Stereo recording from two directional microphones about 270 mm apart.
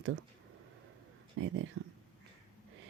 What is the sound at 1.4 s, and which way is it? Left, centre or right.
Speech, right.